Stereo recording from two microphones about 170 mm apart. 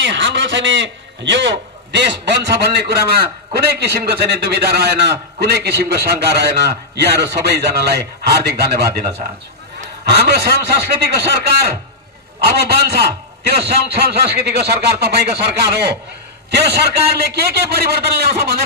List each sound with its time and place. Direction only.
0.0 s a man's voice: 90° right; by 9.0 s 70° right (ahead or behind)
10.0 s a man's voice: 75° right (ahead or behind)